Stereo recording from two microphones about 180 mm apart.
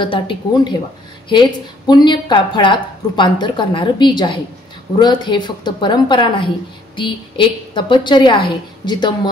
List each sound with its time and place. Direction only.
0.0 s a woman's voice: 25° left (ahead or behind)
1.9 s a woman's voice: 25° left (ahead or behind)